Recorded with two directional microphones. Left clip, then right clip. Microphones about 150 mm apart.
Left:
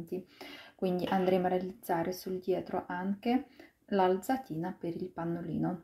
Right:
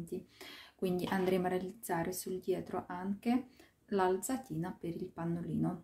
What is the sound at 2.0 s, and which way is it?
Speech, 75° right (ahead or behind).